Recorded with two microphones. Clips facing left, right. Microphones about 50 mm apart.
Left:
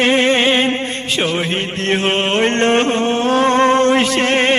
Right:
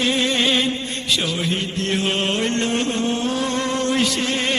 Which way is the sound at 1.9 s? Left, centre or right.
Left.